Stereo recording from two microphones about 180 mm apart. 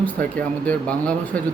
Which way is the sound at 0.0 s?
10° left (ahead or behind).